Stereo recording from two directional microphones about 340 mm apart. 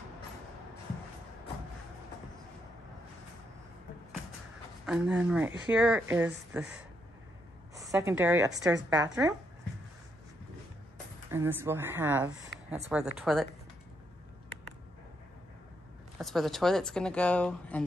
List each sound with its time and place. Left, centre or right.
4.8 s speech: centre
7.8 s speech: centre
11.2 s speech: centre
12.5 s a sound: left
13.2 s speech: centre
16.2 s speech: centre